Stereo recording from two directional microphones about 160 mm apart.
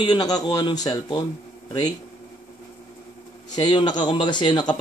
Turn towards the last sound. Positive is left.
turn(degrees=30)  # may be behind; listen again after turning